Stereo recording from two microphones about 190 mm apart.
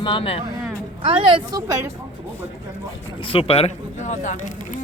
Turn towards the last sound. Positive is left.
turn(degrees=40)  # may be behind; listen again after turning